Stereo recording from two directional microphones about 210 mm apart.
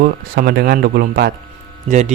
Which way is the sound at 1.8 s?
35° right (ahead or behind).